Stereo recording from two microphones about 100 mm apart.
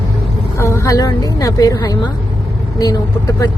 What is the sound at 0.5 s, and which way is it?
A woman's voice, 25° left (ahead or behind).